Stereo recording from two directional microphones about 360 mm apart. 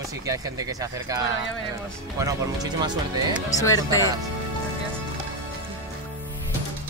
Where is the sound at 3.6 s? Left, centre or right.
Centre.